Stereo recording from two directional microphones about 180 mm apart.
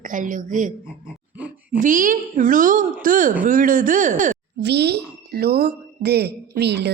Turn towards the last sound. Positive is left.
turn(degrees=-65)  # may be behind; listen again after turning